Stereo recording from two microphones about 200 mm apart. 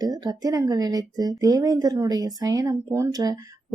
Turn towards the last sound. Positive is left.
turn(degrees=-20)  # may be behind; listen again after turning